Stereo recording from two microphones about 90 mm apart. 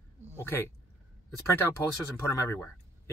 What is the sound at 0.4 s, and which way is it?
Speech, 25° left (ahead or behind).